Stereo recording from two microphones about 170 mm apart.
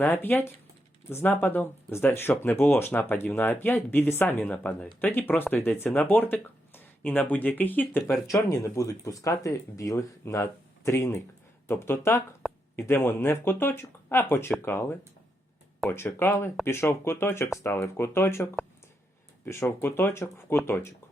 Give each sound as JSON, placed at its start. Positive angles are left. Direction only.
{"t": 0.0, "sound": "speech", "side_deg": 10}
{"t": 19.5, "sound": "speech", "side_deg": 15}